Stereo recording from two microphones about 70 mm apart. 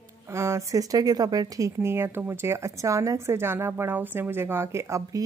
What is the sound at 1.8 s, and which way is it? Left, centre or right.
Speech, right.